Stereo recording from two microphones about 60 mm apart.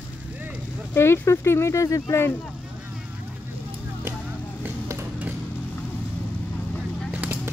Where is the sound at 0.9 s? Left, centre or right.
Left.